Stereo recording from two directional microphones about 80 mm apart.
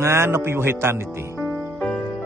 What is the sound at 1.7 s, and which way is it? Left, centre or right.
Music, centre.